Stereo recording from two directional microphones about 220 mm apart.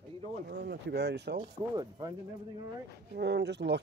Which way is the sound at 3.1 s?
50° right (ahead or behind).